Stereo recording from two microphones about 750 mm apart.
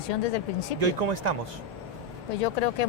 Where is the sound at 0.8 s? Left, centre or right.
Right.